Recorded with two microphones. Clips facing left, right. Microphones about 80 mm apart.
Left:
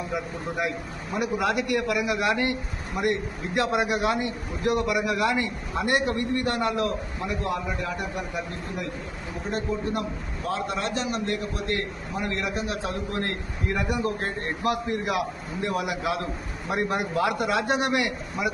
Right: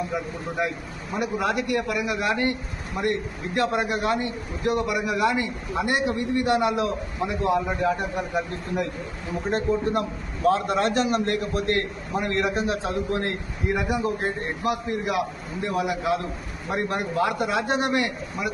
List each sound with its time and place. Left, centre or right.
0.1 s a man's voice: centre
6.4 s a man's voice: centre
9.5 s a man's voice: right
13.8 s a man's voice: centre
14.6 s a man's voice: centre